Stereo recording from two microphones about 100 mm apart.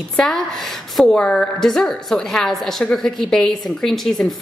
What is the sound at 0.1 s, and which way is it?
A woman's voice, 5° left (ahead or behind).